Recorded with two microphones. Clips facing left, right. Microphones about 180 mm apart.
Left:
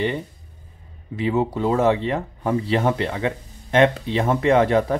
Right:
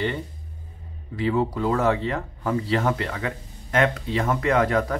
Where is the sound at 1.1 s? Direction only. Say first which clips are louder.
Left 2 dB; 20° left (ahead or behind).